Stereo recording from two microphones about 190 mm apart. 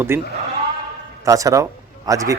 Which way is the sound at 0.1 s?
10° right (ahead or behind).